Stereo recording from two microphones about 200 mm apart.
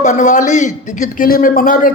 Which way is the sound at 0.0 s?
35° left (ahead or behind).